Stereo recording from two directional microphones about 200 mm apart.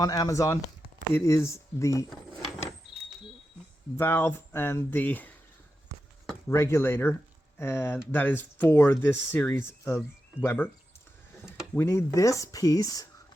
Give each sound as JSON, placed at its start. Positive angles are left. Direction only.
{"t": 0.0, "sound": "speech", "side_deg": 20}
{"t": 3.9, "sound": "speech", "side_deg": 10}
{"t": 6.5, "sound": "speech", "side_deg": 15}
{"t": 11.7, "sound": "speech", "side_deg": 10}